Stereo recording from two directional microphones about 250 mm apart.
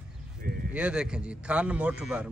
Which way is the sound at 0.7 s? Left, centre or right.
Centre.